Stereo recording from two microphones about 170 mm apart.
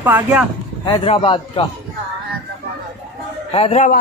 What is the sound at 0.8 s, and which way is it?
Speech, 30° left (ahead or behind).